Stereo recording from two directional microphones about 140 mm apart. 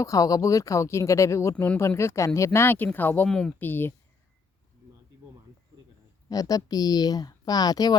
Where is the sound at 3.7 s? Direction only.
15° left (ahead or behind).